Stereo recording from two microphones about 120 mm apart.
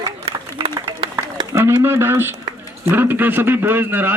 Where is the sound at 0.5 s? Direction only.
50° right (ahead or behind).